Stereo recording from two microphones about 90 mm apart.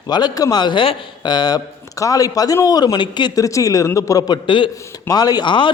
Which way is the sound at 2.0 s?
40° left (ahead or behind).